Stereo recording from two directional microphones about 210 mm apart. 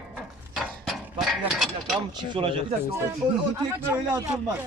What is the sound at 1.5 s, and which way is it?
Mechanisms, centre (ahead or behind).